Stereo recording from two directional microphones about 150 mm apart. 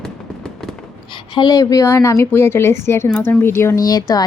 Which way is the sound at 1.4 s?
25° left (ahead or behind).